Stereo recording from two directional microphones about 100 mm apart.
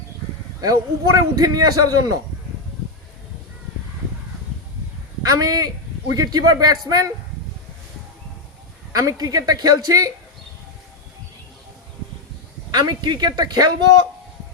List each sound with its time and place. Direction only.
0.6 s a man's voice: 40° right (ahead or behind)
5.2 s a man's voice: 40° right (ahead or behind)
8.9 s a man's voice: 35° right (ahead or behind)
12.7 s a woman's voice: 45° right (ahead or behind)